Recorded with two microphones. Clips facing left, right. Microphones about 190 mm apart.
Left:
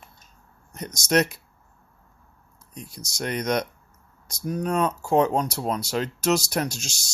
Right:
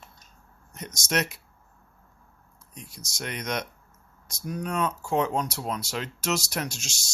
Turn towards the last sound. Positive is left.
turn(degrees=35)  # may be behind; listen again after turning